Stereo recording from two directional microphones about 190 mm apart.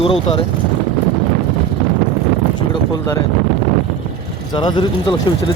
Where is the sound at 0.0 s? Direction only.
30° left (ahead or behind).